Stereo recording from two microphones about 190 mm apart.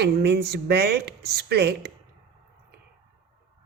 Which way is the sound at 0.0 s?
55° right (ahead or behind).